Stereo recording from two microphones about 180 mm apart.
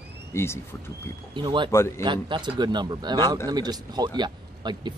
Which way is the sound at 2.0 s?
25° right (ahead or behind).